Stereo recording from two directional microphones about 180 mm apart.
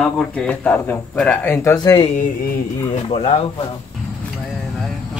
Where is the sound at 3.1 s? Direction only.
30° left (ahead or behind).